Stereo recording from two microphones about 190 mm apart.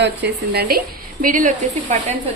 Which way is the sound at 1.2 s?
45° right (ahead or behind).